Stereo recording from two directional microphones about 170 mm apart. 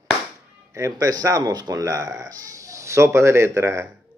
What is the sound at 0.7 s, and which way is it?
Speech, 20° right (ahead or behind).